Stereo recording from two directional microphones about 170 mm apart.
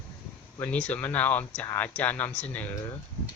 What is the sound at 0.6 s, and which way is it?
Speech, 10° left (ahead or behind).